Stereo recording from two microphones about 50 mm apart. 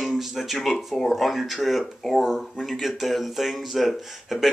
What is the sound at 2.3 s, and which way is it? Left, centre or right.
Speech, centre.